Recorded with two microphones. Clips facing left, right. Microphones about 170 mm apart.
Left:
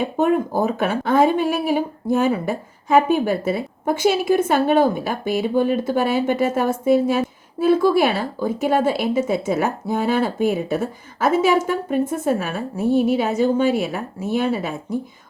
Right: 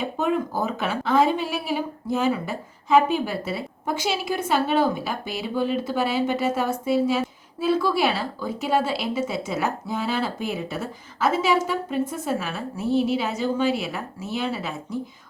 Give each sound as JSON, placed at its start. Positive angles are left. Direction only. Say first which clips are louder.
{"t": 0.0, "sound": "speech", "louder": "left 5 dB", "side_deg": 50}